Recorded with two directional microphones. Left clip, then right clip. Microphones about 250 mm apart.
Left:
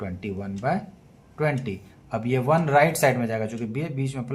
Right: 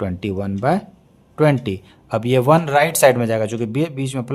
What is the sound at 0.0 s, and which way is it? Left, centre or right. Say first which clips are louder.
Speech: right 9 dB; right.